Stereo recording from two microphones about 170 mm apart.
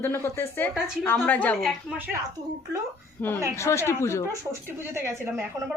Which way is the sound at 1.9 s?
10° right (ahead or behind).